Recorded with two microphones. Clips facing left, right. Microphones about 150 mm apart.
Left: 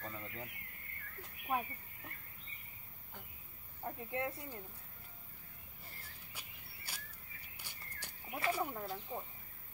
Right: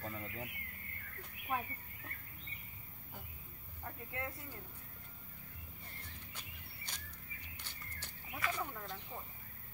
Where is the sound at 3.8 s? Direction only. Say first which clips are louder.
Left 5 dB; 25° left (ahead or behind).